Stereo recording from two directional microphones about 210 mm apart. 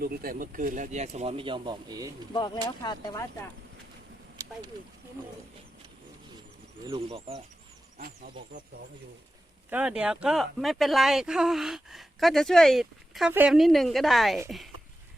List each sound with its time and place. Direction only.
0.0 s speech: 45° right (ahead or behind); by 2.1 s 20° right (ahead or behind)
2.3 s speech: 20° left (ahead or behind)
4.4 s a sound: 15° right (ahead or behind)
6.8 s speech: 25° right (ahead or behind)
7.9 s speech: 45° right (ahead or behind)
9.6 s speech: 5° right (ahead or behind)